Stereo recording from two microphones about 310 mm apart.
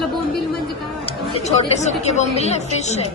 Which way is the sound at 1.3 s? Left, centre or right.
Left.